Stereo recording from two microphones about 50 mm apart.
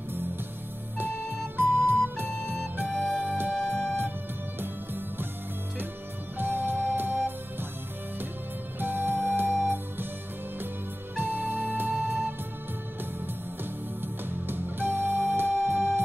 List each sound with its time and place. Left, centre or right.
0.9 s flute: right
3.6 s music: right
6.3 s music: right
8.7 s music: right
11.1 s music: right
14.0 s music: right